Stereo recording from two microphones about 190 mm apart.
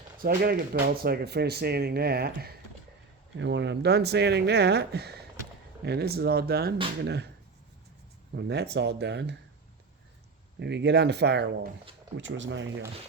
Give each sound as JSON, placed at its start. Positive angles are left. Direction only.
{"t": 0.2, "sound": "speech", "side_deg": -50}
{"t": 3.3, "sound": "speech", "side_deg": -70}
{"t": 8.3, "sound": "speech", "side_deg": -60}
{"t": 10.6, "sound": "speech", "side_deg": -65}
{"t": 12.1, "sound": "speech", "side_deg": -75}